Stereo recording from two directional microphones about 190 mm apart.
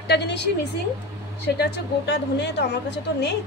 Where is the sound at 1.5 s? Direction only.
60° left (ahead or behind).